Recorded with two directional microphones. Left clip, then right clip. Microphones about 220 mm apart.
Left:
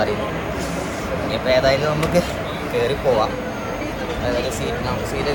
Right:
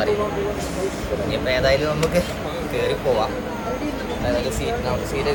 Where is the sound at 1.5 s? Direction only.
5° right (ahead or behind).